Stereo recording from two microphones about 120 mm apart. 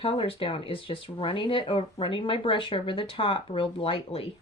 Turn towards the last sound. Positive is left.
turn(degrees=55)  # may be behind; listen again after turning